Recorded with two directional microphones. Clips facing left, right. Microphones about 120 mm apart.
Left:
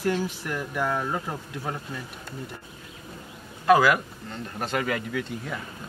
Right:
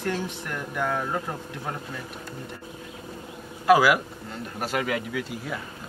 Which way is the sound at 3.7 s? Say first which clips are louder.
Even; 5° right (ahead or behind).